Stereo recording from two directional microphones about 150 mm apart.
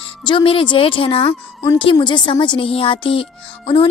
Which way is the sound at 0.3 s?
35° left (ahead or behind).